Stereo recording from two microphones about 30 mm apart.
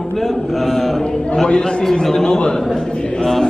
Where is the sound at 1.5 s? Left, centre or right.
Left.